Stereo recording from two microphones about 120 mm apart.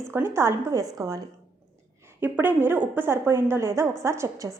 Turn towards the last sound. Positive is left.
turn(degrees=-25)  # may be behind; listen again after turning